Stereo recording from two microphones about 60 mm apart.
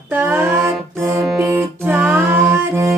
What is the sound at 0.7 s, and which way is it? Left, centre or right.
Music, centre.